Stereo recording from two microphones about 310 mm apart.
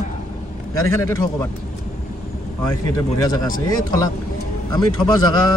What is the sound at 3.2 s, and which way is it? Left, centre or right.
Speech, centre.